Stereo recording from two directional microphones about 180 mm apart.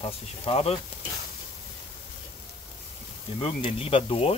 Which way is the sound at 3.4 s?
30° left (ahead or behind).